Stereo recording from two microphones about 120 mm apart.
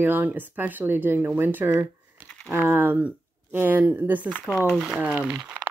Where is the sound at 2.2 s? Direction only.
10° left (ahead or behind).